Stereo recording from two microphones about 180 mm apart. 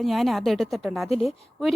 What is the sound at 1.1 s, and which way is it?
Speech, 35° left (ahead or behind).